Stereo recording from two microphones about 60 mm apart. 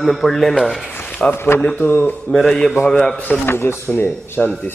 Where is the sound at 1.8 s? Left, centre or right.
Left.